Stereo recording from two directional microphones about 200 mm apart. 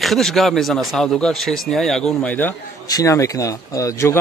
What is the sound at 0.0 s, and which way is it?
Speech, centre (ahead or behind).